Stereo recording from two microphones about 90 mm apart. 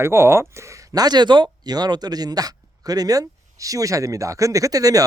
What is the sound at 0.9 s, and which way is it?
Speech, 50° right (ahead or behind).